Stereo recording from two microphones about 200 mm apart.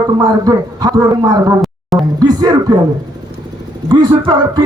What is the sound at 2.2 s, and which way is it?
Speech, 20° right (ahead or behind).